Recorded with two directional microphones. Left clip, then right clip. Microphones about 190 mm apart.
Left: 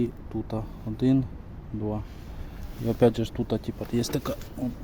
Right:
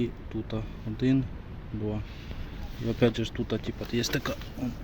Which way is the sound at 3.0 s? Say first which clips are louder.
Left 4 dB; 20° left (ahead or behind).